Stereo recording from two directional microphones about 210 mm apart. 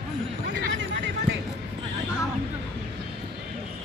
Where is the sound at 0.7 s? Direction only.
60° right (ahead or behind).